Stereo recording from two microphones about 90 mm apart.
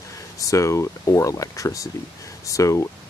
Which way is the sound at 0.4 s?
35° left (ahead or behind).